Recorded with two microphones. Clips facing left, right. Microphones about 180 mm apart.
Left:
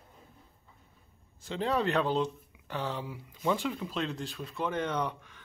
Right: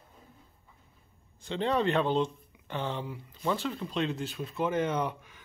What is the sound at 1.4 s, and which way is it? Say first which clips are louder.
Speech: right 2 dB; 5° left (ahead or behind).